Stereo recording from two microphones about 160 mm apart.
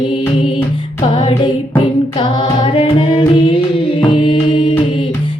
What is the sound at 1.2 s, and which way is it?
Music, 35° left (ahead or behind).